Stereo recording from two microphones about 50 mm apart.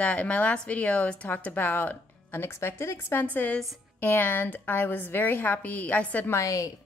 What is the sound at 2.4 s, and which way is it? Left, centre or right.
A woman's voice, left.